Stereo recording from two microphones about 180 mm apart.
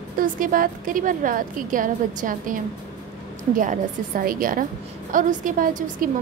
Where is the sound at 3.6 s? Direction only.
50° right (ahead or behind).